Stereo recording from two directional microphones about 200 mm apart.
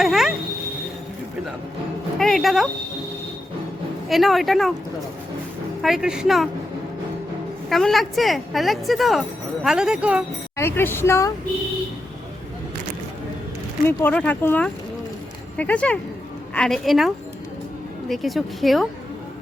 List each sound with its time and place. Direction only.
0.0 s a woman's voice: centre (ahead or behind)
2.1 s a woman's voice: centre (ahead or behind)
4.1 s a woman's voice: centre (ahead or behind)
5.8 s a woman's voice: centre (ahead or behind)
7.7 s a woman's voice: centre (ahead or behind)
10.6 s speech: 10° left (ahead or behind)
13.8 s a woman's voice: 10° left (ahead or behind)
18.1 s a woman's voice: centre (ahead or behind)